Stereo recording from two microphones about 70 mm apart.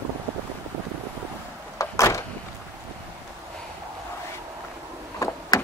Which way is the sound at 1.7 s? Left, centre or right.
Left.